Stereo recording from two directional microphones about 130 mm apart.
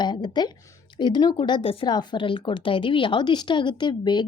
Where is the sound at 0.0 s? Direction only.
35° left (ahead or behind).